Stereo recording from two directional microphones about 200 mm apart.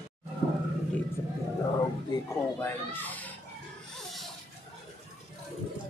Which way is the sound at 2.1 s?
20° left (ahead or behind).